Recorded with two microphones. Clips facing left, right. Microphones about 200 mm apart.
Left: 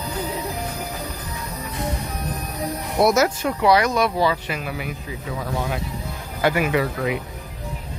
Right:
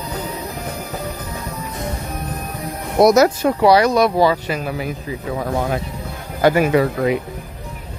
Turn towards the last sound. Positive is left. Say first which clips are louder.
# right 6 dB
turn(degrees=-40)  # may be behind; listen again after turning